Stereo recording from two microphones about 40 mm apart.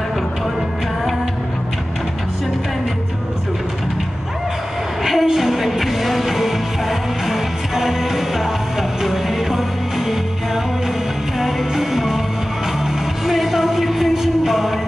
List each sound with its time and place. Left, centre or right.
5.0 s music: centre
13.3 s music: centre